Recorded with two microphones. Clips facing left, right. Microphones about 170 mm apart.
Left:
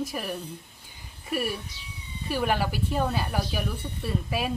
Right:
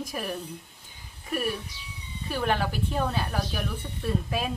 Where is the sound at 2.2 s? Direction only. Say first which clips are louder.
Left 1 dB; 5° left (ahead or behind).